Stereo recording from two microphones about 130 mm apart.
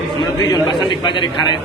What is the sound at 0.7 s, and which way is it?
Speech, 35° left (ahead or behind).